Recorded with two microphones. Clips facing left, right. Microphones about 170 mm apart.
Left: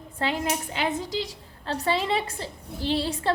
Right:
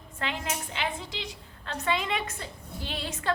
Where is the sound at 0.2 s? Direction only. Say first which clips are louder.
Left 6 dB; 40° left (ahead or behind).